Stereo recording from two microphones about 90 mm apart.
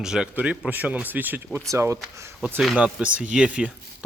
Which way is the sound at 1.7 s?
35° right (ahead or behind).